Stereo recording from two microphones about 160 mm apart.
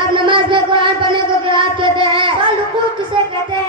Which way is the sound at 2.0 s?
30° right (ahead or behind).